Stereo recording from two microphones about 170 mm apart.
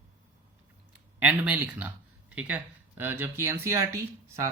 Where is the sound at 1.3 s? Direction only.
10° right (ahead or behind).